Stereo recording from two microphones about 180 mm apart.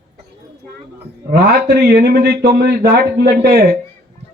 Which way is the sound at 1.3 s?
65° right (ahead or behind).